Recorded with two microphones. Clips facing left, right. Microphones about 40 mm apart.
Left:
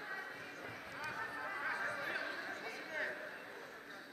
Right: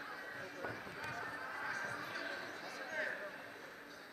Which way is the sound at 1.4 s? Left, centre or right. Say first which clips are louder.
Left 4 dB; left.